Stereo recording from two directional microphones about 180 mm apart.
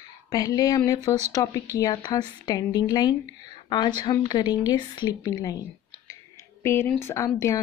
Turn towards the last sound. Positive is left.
turn(degrees=15)  # may be behind; listen again after turning